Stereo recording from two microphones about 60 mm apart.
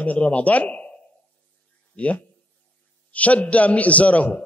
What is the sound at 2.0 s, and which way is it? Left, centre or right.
A man's voice, left.